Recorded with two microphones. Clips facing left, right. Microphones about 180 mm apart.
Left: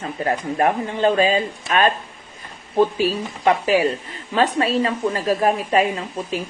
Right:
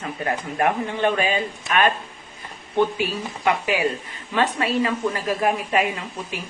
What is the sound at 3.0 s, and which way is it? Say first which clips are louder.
A woman's voice: left 4 dB; 35° left (ahead or behind).